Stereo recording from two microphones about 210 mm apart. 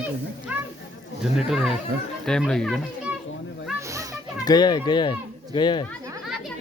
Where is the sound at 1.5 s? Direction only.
Centre (ahead or behind).